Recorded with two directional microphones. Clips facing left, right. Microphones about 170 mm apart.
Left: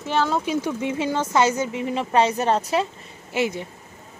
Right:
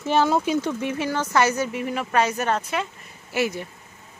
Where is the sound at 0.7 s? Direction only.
20° left (ahead or behind).